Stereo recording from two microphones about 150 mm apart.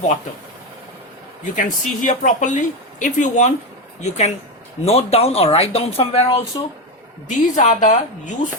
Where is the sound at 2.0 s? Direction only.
55° left (ahead or behind).